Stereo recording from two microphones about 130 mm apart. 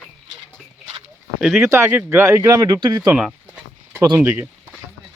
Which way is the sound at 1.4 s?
5° right (ahead or behind).